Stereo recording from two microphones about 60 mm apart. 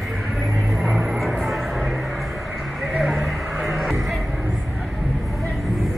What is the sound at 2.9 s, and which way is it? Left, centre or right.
Music, centre.